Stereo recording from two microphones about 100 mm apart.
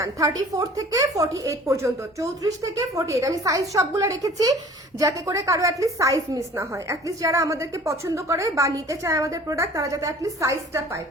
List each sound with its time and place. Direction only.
0.0 s a woman's voice: 35° right (ahead or behind)